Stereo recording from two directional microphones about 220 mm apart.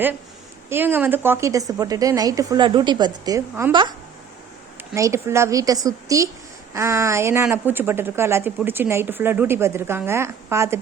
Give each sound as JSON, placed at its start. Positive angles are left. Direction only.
{"t": 0.7, "sound": "a woman's voice", "side_deg": -10}